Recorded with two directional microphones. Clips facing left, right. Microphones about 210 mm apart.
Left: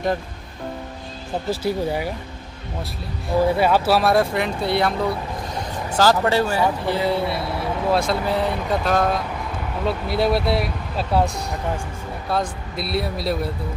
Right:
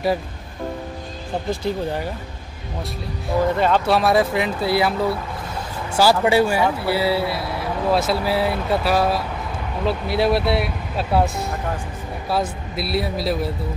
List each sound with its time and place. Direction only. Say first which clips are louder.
1.5 s speech: left 2 dB; 10° left (ahead or behind)
3.4 s speech: even; 10° left (ahead or behind)